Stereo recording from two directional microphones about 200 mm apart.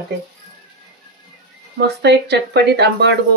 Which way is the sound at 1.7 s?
55° right (ahead or behind).